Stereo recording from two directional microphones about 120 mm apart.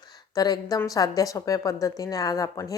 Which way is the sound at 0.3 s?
30° left (ahead or behind).